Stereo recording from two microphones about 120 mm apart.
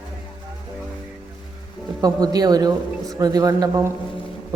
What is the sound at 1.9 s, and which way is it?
A man's voice, 30° right (ahead or behind).